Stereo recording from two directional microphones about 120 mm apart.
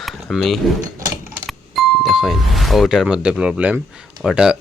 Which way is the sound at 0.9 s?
30° right (ahead or behind).